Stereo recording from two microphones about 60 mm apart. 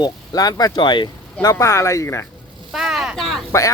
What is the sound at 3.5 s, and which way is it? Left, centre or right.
Speech, left.